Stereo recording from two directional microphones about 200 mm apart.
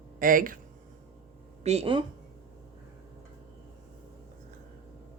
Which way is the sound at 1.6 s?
30° right (ahead or behind).